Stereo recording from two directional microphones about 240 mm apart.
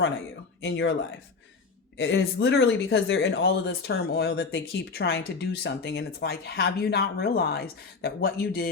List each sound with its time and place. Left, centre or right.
0.6 s speech: left
2.0 s speech: left